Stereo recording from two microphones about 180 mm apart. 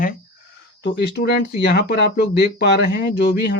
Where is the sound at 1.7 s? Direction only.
55° left (ahead or behind).